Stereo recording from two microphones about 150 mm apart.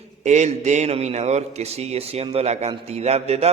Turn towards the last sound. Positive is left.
turn(degrees=-45)  # may be behind; listen again after turning